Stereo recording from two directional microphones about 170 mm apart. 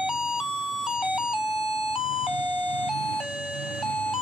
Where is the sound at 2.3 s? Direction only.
30° left (ahead or behind).